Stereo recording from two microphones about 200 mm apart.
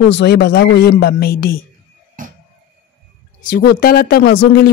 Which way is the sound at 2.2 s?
40° right (ahead or behind).